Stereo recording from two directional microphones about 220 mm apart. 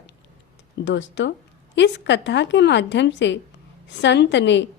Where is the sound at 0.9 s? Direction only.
55° left (ahead or behind).